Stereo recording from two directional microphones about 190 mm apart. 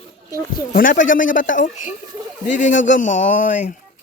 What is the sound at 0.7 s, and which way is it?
Speech, 45° left (ahead or behind).